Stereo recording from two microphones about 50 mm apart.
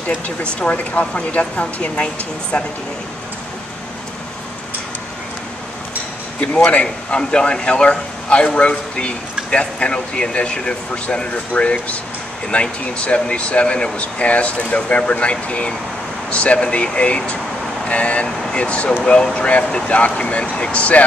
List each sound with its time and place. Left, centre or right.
0.4 s speech: left
6.4 s speech: left